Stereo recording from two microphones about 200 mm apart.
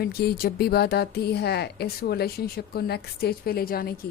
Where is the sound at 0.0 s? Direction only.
50° left (ahead or behind).